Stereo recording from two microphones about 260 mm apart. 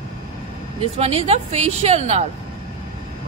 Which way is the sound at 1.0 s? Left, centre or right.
Right.